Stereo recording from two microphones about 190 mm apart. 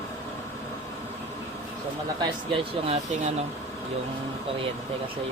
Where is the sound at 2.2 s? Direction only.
30° right (ahead or behind).